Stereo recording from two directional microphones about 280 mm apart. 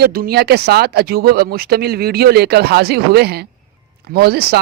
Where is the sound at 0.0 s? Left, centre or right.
Right.